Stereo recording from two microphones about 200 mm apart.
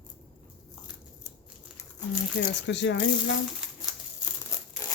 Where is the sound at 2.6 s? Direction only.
65° left (ahead or behind).